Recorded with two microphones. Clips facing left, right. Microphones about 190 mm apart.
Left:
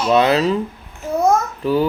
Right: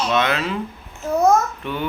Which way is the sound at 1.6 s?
35° left (ahead or behind).